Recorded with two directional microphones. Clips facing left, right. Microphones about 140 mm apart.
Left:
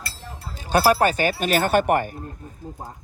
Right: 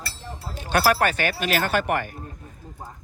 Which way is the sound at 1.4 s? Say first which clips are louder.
Left 5 dB; 50° left (ahead or behind).